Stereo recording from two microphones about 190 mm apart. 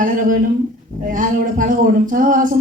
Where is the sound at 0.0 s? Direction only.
45° right (ahead or behind).